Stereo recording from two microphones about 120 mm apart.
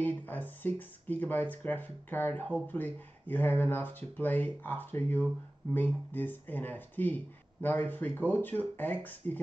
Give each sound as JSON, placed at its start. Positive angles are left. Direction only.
{"t": 0.0, "sound": "speech", "side_deg": 15}